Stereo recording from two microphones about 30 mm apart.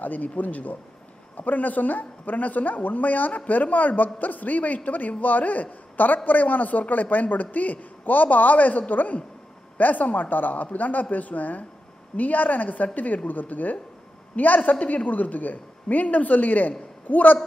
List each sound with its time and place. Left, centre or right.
0.0 s a man's voice: left
1.3 s a man's voice: left
10.3 s a man's voice: left
17.1 s a woman's voice: left